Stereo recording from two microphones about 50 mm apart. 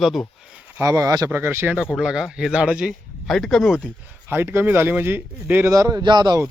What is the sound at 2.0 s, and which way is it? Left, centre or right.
Speech, centre.